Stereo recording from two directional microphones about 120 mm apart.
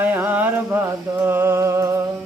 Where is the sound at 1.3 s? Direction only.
20° right (ahead or behind).